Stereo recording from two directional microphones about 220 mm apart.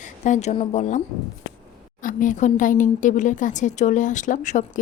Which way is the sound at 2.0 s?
35° left (ahead or behind).